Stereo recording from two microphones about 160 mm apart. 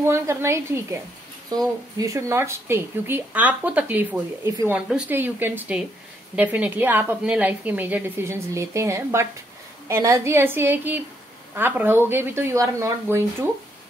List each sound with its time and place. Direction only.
0.1 s a woman's voice: 15° right (ahead or behind)
1.5 s a woman's voice: 25° right (ahead or behind)